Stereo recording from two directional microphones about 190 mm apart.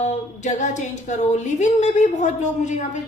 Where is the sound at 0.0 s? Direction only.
40° left (ahead or behind).